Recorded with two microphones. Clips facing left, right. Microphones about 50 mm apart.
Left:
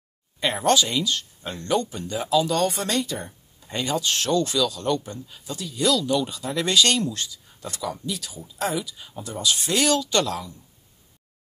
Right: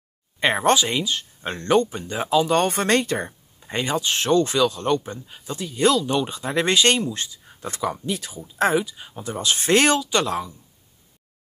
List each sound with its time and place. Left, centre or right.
0.4 s speech: right
1.4 s speech: right
2.6 s speech: right
3.6 s speech: right
9.9 s speech: centre